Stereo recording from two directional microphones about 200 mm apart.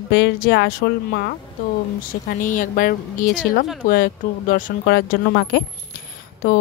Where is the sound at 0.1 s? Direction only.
60° left (ahead or behind).